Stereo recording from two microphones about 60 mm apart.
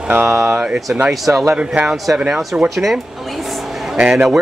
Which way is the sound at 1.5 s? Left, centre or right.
Centre.